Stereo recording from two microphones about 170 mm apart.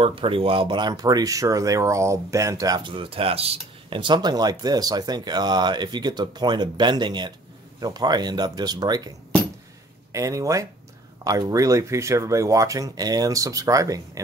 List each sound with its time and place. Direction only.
0.0 s speech: 30° right (ahead or behind)
10.1 s speech: 20° right (ahead or behind)